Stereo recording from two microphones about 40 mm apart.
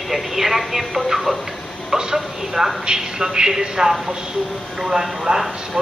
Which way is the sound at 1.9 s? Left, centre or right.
Centre.